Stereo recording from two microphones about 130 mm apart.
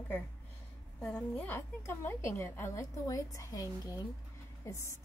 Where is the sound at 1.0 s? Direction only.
10° left (ahead or behind).